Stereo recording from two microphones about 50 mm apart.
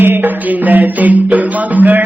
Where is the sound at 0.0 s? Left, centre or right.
Right.